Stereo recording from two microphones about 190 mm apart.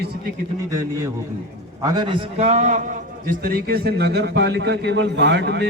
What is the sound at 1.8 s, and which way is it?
A man's voice, 25° right (ahead or behind).